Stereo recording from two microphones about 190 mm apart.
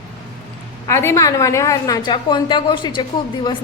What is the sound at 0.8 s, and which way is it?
A woman's voice, 15° left (ahead or behind).